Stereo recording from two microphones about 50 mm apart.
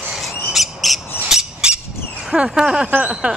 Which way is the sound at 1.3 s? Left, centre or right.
Centre.